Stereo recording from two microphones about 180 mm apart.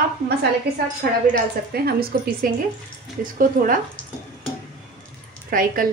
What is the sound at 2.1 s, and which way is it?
A woman's voice, 55° right (ahead or behind).